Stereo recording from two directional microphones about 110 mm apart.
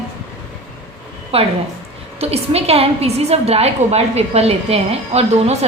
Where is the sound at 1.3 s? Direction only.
60° right (ahead or behind).